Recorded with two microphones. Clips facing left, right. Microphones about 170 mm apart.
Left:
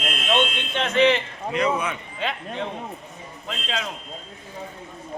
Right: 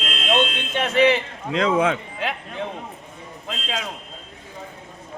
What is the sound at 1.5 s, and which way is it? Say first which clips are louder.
Speech: right 4 dB; 90° right.